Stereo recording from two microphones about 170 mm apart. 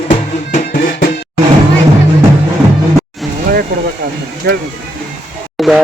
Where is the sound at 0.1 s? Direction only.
50° left (ahead or behind).